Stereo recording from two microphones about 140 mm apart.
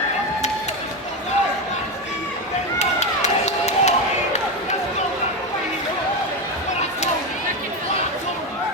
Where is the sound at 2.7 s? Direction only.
55° left (ahead or behind).